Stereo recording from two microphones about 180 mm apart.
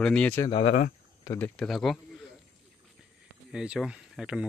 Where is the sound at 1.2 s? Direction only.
15° left (ahead or behind).